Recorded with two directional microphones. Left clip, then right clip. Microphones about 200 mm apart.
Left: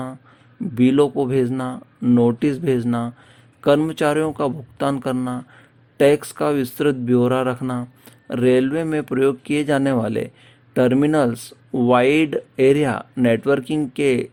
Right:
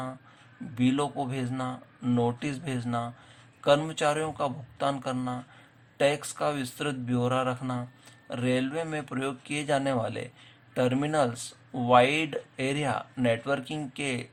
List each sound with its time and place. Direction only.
0.7 s speech: 40° left (ahead or behind)